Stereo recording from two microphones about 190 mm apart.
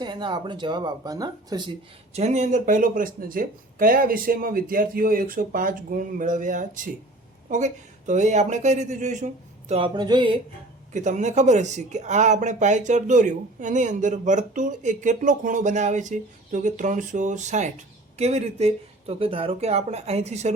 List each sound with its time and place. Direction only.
0.0 s speech: 25° right (ahead or behind)
2.1 s speech: 35° right (ahead or behind)
10.9 s speech: 40° right (ahead or behind)